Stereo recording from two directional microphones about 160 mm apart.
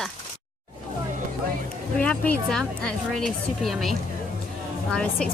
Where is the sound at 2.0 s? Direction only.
10° left (ahead or behind).